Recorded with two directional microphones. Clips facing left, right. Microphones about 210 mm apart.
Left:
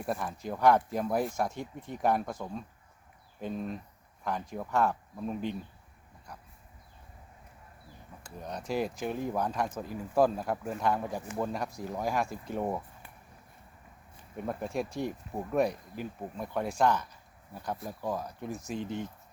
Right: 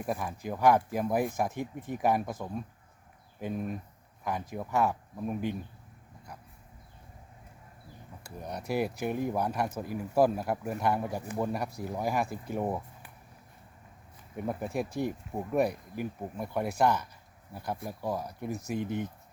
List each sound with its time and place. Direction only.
0.0 s speech: 10° right (ahead or behind)
8.2 s speech: 10° right (ahead or behind)
14.3 s speech: 10° right (ahead or behind)